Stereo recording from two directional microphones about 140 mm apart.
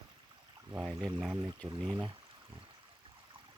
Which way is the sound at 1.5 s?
30° right (ahead or behind).